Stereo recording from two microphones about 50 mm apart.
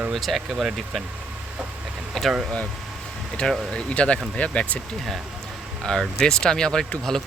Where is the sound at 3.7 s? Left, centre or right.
Left.